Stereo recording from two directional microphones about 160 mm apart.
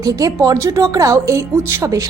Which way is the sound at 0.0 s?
20° right (ahead or behind).